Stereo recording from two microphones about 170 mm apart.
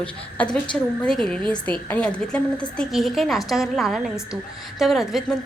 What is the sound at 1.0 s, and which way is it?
A woman's voice, 5° left (ahead or behind).